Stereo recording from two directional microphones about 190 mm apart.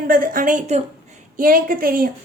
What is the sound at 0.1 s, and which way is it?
A woman's voice, 45° right (ahead or behind).